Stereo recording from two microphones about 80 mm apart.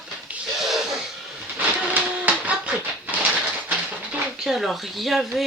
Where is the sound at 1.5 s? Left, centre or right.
Right.